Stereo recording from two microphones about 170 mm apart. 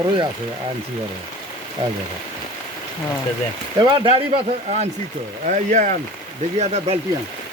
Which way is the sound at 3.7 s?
30° right (ahead or behind).